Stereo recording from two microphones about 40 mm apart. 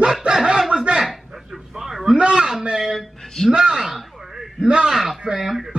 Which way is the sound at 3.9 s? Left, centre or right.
Centre.